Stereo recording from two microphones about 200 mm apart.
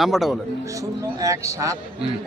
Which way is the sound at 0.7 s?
15° right (ahead or behind).